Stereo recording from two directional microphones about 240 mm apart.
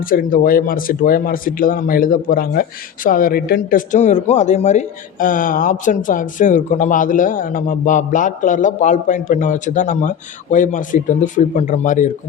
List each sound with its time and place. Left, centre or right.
0.0 s speech: left